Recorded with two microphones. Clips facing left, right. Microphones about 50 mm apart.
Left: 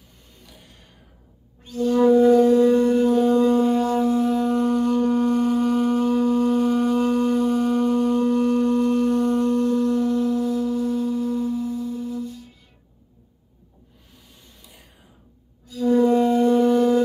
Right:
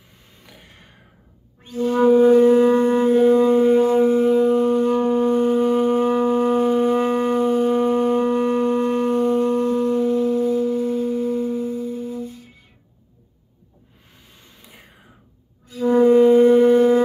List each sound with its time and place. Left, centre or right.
0.5 s a sound: right
1.6 s wind instrument: right
15.6 s music: right